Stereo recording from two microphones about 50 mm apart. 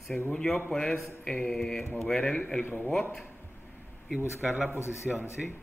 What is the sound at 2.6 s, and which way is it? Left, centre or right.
Speech, left.